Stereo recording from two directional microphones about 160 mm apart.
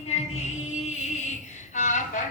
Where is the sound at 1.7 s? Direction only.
50° left (ahead or behind).